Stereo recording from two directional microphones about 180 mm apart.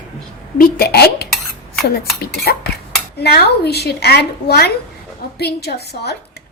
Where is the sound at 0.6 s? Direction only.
60° left (ahead or behind).